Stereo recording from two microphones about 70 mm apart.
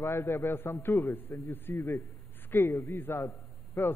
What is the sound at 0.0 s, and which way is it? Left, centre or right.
A man's voice, left.